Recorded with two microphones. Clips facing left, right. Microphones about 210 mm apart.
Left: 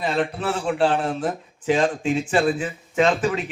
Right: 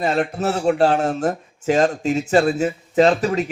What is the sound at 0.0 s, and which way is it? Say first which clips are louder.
A man's voice: right 3 dB; 45° right (ahead or behind).